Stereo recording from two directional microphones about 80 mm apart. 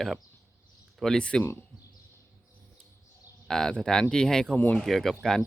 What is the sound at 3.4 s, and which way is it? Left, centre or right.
Speech, centre.